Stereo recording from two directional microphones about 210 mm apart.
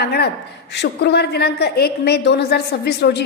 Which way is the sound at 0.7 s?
55° left (ahead or behind).